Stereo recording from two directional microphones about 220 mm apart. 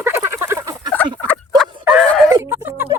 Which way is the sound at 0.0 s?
10° right (ahead or behind).